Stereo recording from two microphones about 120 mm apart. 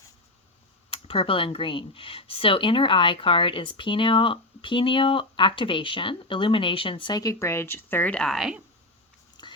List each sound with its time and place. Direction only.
0.9 s speech: 50° left (ahead or behind); by 8.5 s centre (ahead or behind)
9.4 s whispering: 35° left (ahead or behind)